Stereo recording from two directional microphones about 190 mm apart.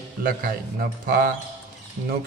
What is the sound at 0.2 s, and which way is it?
Speech, 50° right (ahead or behind).